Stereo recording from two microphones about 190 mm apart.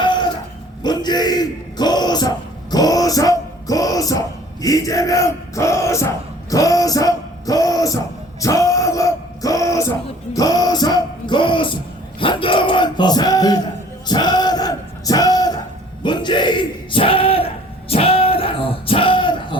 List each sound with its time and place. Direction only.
0.0 s a sound: 25° left (ahead or behind)
4.6 s battle cry: 20° left (ahead or behind)
6.5 s music: 20° left (ahead or behind)
12.2 s a sound: 25° left (ahead or behind)
14.1 s music: 20° left (ahead or behind)
16.0 s bellow: 25° left (ahead or behind)